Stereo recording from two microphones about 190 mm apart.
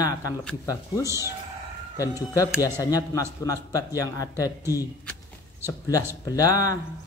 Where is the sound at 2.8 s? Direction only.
20° left (ahead or behind).